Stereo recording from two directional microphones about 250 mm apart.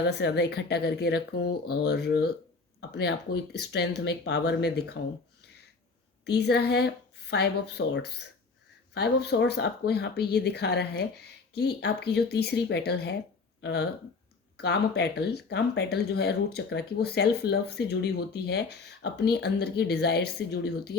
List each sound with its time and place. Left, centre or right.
0.1 s speech: left
6.2 s speech: left